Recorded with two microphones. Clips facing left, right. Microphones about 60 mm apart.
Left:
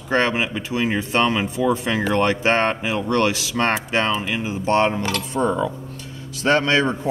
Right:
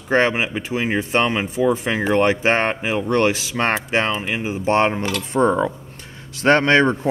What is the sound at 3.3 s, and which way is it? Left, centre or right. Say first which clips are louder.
Speech: even; right.